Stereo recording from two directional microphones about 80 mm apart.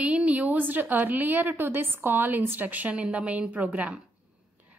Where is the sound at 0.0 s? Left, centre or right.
Centre.